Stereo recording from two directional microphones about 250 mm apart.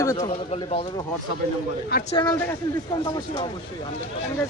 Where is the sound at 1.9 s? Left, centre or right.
Left.